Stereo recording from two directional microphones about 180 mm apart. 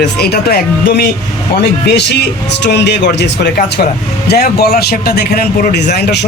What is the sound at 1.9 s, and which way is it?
Speech, 70° left (ahead or behind).